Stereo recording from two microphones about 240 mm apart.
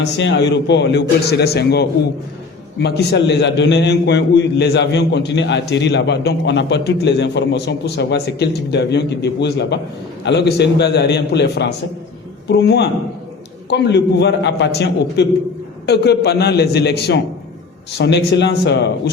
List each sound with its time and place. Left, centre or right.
0.0 s a man's voice: left